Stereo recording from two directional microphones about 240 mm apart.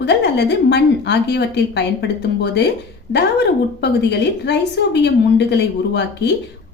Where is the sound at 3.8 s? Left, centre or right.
Left.